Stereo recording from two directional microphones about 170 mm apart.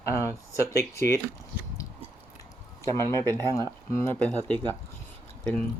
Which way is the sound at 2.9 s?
15° left (ahead or behind).